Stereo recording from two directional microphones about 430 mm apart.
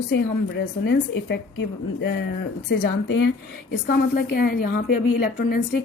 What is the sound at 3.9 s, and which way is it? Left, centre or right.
A woman's voice, left.